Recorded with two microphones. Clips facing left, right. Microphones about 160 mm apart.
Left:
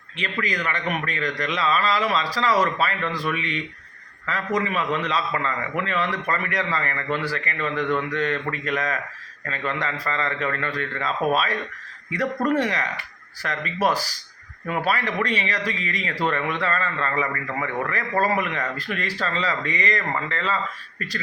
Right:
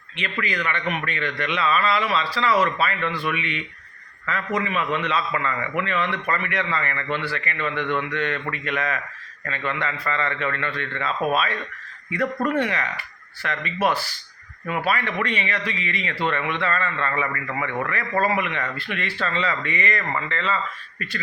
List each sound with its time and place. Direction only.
0.2 s speech: 40° left (ahead or behind)
12.5 s speech: 35° left (ahead or behind)